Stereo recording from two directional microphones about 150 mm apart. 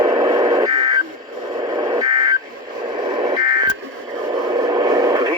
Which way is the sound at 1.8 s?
25° right (ahead or behind).